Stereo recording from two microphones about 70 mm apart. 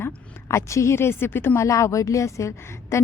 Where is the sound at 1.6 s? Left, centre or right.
Left.